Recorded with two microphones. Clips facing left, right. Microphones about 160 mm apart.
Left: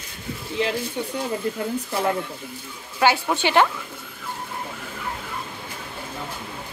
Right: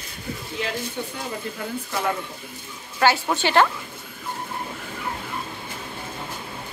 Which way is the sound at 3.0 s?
15° left (ahead or behind).